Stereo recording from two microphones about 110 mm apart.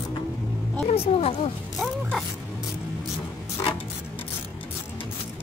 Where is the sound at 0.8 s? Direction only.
60° left (ahead or behind).